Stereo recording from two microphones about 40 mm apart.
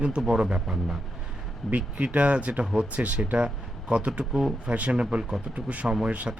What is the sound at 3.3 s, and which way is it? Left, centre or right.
Speech, right.